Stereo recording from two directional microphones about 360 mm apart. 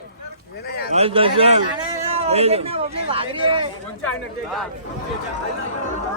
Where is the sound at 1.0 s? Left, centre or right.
Centre.